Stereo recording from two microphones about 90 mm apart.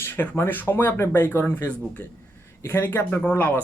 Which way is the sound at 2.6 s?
25° left (ahead or behind).